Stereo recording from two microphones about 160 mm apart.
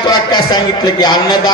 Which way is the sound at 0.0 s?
25° left (ahead or behind).